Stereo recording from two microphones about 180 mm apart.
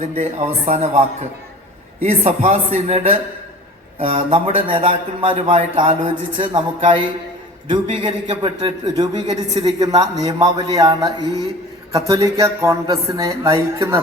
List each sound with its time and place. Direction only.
0.0 s a man's voice: 40° right (ahead or behind); by 14.0 s 15° right (ahead or behind)